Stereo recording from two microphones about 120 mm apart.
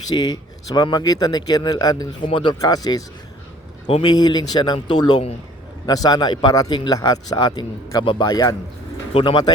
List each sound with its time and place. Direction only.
0.1 s speech: 35° left (ahead or behind)
4.0 s speech: 35° left (ahead or behind)
9.1 s speech: 45° left (ahead or behind)